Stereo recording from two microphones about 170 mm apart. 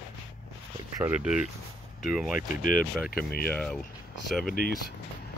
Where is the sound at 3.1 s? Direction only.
65° left (ahead or behind).